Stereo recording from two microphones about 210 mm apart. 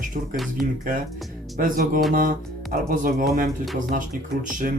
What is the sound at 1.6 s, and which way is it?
Speech, 40° right (ahead or behind).